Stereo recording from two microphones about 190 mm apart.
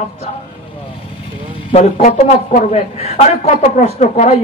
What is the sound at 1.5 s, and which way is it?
Vehicle, 30° left (ahead or behind).